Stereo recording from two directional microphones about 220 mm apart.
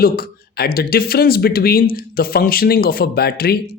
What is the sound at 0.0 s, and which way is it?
Speech, 45° left (ahead or behind).